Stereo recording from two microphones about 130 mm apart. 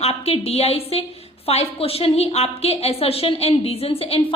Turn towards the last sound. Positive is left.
turn(degrees=50)  # may be behind; listen again after turning